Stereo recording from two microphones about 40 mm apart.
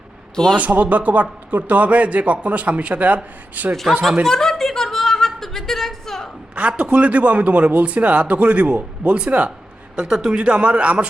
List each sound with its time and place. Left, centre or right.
0.5 s speech: right
3.5 s a man's voice: right
4.3 s a sound: centre
6.6 s speech: right
9.9 s speech: right